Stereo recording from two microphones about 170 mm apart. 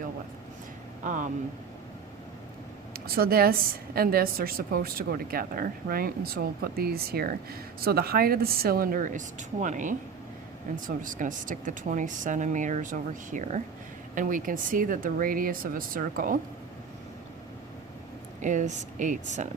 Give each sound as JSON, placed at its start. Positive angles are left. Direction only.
{"t": 1.0, "sound": "speech", "side_deg": -50}
{"t": 2.9, "sound": "a woman's voice", "side_deg": -60}
{"t": 18.4, "sound": "speech", "side_deg": -45}